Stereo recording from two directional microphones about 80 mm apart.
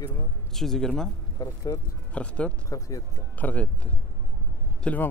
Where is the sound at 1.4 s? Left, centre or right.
Left.